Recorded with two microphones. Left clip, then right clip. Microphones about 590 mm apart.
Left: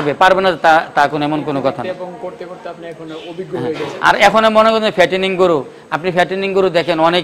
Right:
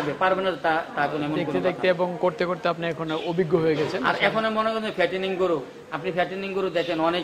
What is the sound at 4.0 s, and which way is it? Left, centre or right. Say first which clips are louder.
A man's voice: left 12 dB; left.